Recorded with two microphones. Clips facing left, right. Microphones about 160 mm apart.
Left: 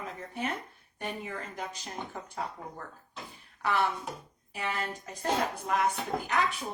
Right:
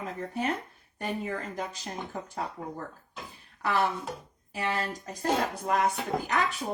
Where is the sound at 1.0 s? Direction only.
40° right (ahead or behind).